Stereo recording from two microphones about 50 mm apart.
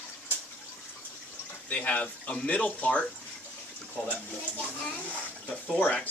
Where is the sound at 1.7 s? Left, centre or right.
Left.